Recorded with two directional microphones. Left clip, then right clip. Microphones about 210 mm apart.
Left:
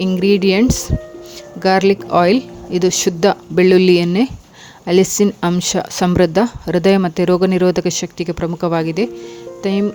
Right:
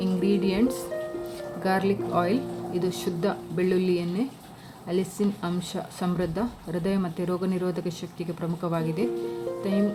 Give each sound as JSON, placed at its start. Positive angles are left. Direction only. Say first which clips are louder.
{"t": 0.0, "sound": "a woman's voice", "louder": "left 11 dB", "side_deg": 50}